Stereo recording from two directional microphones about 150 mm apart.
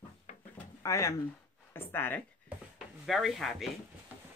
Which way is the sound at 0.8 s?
20° left (ahead or behind).